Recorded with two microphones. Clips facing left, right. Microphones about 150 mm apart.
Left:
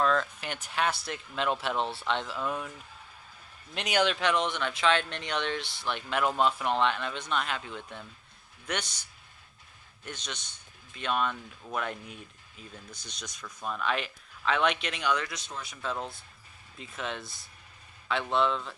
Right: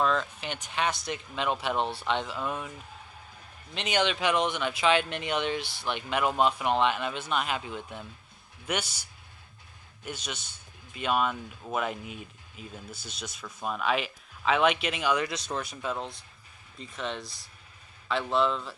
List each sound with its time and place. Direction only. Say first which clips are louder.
0.0 s speech: even; centre (ahead or behind)
3.8 s speech: even; 5° left (ahead or behind)
15.5 s speech: right 9 dB; 75° right (ahead or behind)
16.0 s speech: even; 5° left (ahead or behind)